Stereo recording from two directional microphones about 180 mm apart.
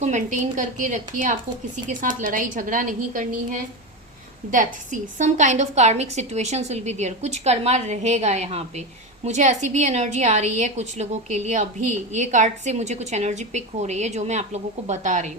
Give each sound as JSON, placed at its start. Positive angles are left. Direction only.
{"t": 0.0, "sound": "a woman's voice", "side_deg": -40}
{"t": 4.5, "sound": "a woman's voice", "side_deg": -45}